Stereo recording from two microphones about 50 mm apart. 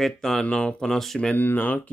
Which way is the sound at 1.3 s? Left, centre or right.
Left.